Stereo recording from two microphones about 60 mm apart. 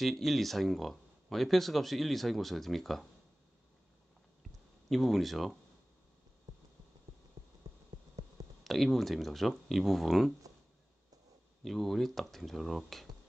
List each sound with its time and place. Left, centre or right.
0.0 s speech: centre
4.8 s speech: centre
8.2 s clicking: right
8.6 s speech: centre
11.6 s speech: centre